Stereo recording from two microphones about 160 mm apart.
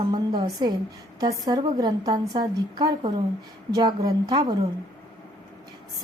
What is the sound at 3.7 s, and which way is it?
Speech, 25° right (ahead or behind).